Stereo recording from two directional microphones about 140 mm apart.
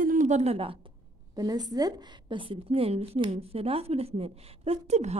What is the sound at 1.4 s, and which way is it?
A woman's voice, 30° right (ahead or behind).